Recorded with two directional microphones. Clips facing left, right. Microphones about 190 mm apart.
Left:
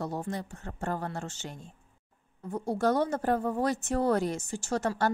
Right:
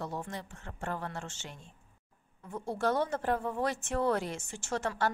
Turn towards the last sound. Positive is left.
turn(degrees=40)  # may be behind; listen again after turning